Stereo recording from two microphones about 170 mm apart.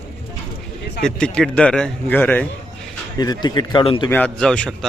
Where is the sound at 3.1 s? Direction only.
25° left (ahead or behind).